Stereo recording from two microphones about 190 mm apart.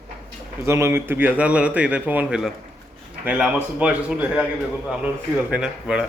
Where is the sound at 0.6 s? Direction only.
15° right (ahead or behind).